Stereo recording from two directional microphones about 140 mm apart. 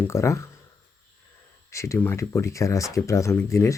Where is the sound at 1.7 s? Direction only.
20° left (ahead or behind).